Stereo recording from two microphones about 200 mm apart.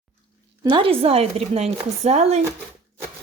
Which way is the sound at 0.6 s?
25° right (ahead or behind).